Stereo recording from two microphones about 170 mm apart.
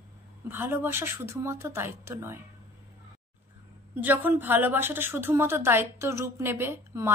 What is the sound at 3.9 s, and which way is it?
A woman's voice, 10° right (ahead or behind).